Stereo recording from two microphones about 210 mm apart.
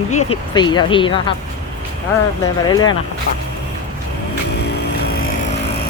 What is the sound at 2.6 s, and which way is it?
Speech, 20° left (ahead or behind).